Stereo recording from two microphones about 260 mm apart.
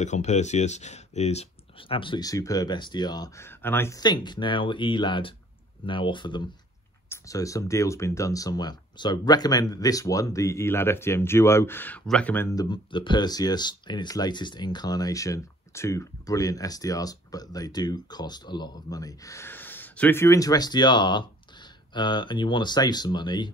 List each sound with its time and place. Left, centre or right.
0.0 s speech: left